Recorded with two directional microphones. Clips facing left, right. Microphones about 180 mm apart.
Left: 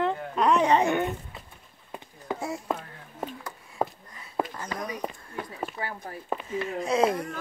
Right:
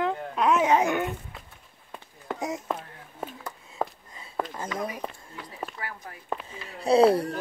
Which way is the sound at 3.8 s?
15° left (ahead or behind).